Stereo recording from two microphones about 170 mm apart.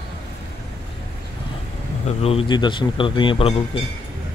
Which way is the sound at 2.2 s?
30° left (ahead or behind).